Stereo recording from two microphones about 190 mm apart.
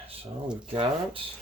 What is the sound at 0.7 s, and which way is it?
Speech, 25° right (ahead or behind).